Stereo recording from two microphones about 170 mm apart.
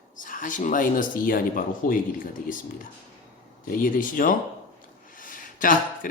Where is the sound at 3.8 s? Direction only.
55° left (ahead or behind).